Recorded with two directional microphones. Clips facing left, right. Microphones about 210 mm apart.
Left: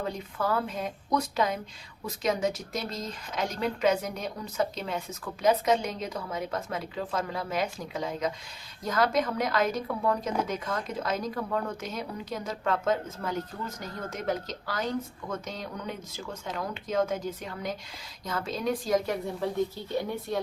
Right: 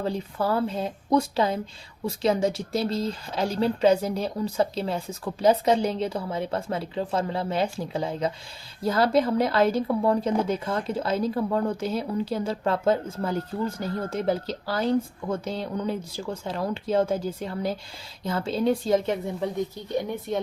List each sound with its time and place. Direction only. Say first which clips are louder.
0.0 s a woman's voice: right 4 dB; 30° right (ahead or behind)